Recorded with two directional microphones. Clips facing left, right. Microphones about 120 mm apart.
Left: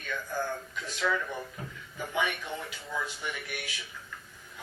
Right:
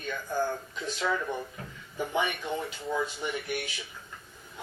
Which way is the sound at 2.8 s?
25° right (ahead or behind).